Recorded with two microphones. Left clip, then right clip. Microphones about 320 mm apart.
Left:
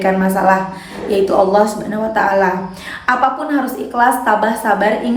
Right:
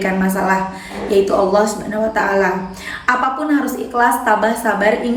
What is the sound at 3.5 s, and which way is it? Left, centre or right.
A woman's voice, centre.